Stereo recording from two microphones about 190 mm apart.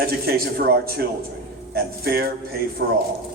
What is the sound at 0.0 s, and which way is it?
A man's voice, 55° right (ahead or behind).